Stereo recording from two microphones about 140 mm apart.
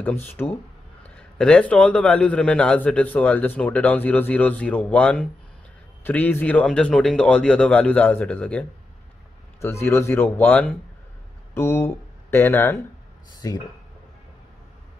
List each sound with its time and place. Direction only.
0.0 s a man's voice: 15° left (ahead or behind)